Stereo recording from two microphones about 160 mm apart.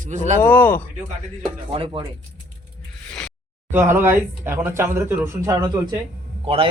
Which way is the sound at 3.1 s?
5° left (ahead or behind).